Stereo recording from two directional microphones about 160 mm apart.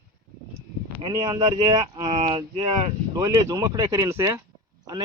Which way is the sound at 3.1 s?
20° right (ahead or behind).